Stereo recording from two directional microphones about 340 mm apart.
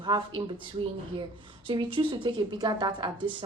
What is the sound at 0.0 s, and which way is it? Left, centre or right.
Speech, centre.